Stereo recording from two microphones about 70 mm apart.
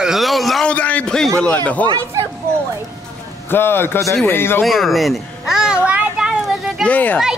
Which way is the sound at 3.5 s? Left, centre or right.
Left.